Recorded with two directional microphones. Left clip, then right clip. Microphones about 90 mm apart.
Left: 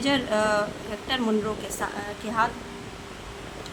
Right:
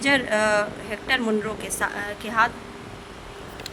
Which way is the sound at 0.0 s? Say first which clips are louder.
Right 3 dB; 65° right (ahead or behind).